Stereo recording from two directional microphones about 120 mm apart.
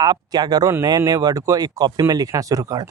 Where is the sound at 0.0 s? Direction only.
35° right (ahead or behind).